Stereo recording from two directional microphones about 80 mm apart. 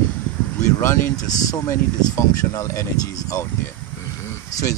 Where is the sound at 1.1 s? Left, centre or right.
Left.